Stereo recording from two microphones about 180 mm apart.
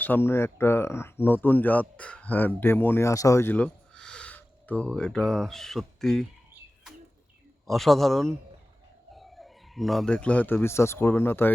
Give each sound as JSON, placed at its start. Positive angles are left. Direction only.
{"t": 0.0, "sound": "speech", "side_deg": 10}
{"t": 7.7, "sound": "a man's voice", "side_deg": 0}